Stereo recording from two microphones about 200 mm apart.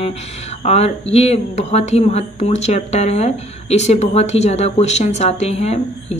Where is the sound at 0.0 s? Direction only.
30° left (ahead or behind).